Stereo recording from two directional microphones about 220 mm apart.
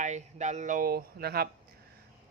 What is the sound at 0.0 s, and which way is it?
Speech, 35° right (ahead or behind).